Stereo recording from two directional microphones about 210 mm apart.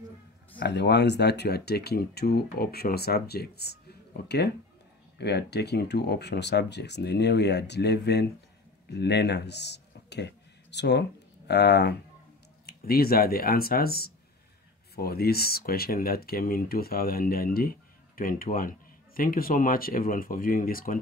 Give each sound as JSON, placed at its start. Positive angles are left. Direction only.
{"t": 0.6, "sound": "speech", "side_deg": 55}
{"t": 5.1, "sound": "speech", "side_deg": 50}